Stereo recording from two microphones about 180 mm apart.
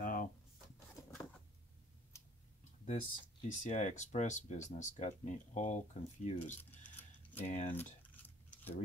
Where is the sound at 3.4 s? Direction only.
45° left (ahead or behind).